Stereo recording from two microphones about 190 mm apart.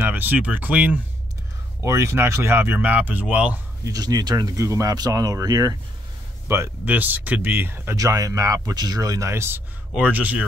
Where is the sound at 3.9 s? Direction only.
20° right (ahead or behind).